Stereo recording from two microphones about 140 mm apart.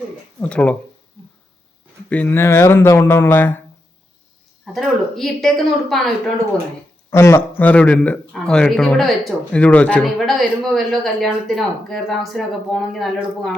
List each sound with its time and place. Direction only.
0.3 s speech: 10° left (ahead or behind)
2.0 s speech: 10° left (ahead or behind)
4.6 s speech: centre (ahead or behind)
7.1 s speech: 20° left (ahead or behind); by 13.6 s centre (ahead or behind)